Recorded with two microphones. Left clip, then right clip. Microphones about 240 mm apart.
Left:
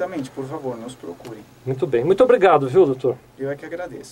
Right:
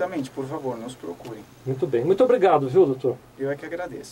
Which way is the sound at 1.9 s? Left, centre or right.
Centre.